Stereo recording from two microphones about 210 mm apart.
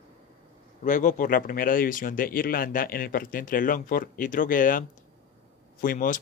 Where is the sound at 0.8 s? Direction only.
40° left (ahead or behind).